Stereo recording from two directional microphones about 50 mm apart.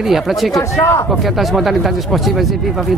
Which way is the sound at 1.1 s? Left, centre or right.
Centre.